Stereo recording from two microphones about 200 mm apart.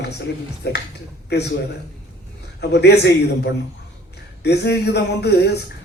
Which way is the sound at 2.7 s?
55° left (ahead or behind).